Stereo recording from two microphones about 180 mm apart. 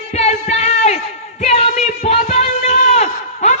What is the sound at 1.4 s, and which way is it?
Music, 35° left (ahead or behind).